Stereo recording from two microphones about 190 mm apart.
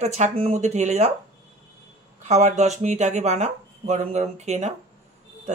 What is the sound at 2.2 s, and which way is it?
Speech, 35° right (ahead or behind).